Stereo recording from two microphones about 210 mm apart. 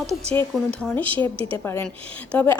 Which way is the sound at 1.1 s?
25° right (ahead or behind).